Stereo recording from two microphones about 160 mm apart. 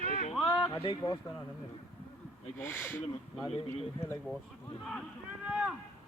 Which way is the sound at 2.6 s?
15° left (ahead or behind).